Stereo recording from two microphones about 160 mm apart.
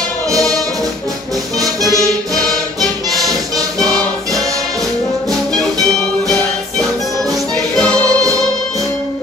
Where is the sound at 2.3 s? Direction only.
5° left (ahead or behind).